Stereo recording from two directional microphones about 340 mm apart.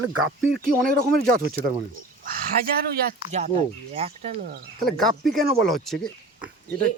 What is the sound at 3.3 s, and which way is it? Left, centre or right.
Speech, centre.